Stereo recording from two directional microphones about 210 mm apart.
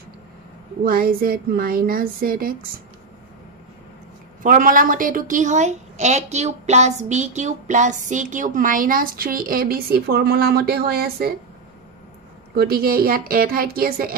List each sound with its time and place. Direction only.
0.8 s a woman's voice: 45° right (ahead or behind)
4.4 s a woman's voice: 40° right (ahead or behind)
12.5 s a woman's voice: 45° right (ahead or behind)